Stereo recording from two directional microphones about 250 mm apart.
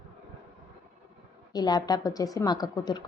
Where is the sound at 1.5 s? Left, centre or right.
Centre.